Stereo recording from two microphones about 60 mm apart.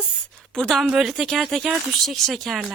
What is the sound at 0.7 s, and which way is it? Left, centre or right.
Speech, centre.